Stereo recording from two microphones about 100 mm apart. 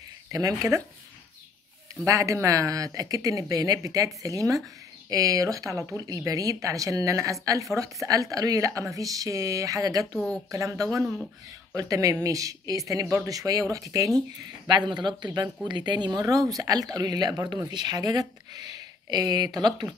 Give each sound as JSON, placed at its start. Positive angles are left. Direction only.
{"t": 0.3, "sound": "a woman's voice", "side_deg": -35}
{"t": 2.0, "sound": "a woman's voice", "side_deg": -30}
{"t": 10.1, "sound": "speech", "side_deg": 5}
{"t": 10.5, "sound": "a woman's voice", "side_deg": -30}
{"t": 14.7, "sound": "a woman's voice", "side_deg": -50}